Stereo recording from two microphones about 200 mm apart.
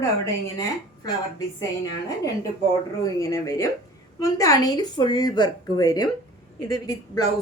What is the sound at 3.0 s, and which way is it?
A woman's voice, 15° left (ahead or behind).